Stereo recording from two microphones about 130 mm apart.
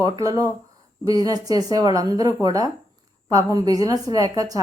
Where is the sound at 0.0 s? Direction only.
25° right (ahead or behind).